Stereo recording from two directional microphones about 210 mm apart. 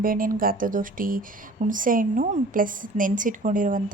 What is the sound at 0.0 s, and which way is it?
A woman's voice, 40° right (ahead or behind).